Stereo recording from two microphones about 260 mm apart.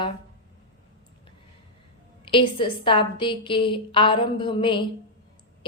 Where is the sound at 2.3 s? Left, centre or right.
Centre.